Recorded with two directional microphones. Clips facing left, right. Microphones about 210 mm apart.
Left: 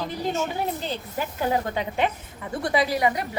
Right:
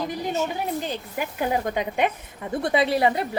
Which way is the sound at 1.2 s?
15° right (ahead or behind).